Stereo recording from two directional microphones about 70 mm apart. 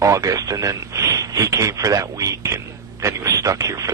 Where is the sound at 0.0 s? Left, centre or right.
Right.